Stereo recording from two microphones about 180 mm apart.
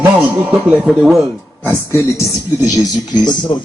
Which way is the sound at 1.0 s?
5° right (ahead or behind).